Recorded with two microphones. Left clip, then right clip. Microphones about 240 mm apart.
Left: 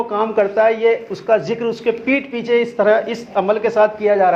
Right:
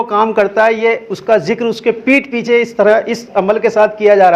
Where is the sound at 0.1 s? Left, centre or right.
Right.